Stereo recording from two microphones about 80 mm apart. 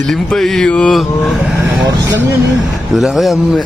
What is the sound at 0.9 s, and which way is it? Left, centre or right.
Speech, centre.